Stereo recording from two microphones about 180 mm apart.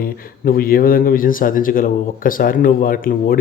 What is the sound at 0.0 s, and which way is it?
Speech, 55° left (ahead or behind).